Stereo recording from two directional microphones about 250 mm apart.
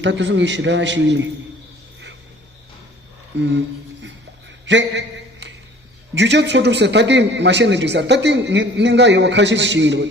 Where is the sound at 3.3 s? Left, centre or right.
Right.